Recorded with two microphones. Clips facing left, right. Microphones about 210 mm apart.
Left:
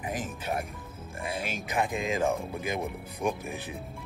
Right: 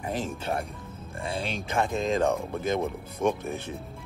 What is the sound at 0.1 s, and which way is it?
Speech, 30° right (ahead or behind).